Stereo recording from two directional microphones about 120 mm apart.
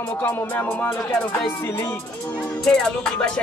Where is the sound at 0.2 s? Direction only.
15° left (ahead or behind).